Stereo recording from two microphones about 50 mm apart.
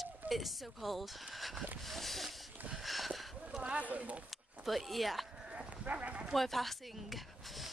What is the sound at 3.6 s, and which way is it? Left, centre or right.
Speech, right.